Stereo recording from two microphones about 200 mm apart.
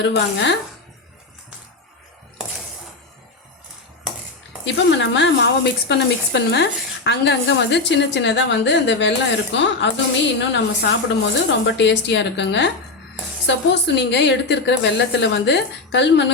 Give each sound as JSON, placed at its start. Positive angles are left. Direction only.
{"t": 0.0, "sound": "speech", "side_deg": 65}
{"t": 4.6, "sound": "speech", "side_deg": 65}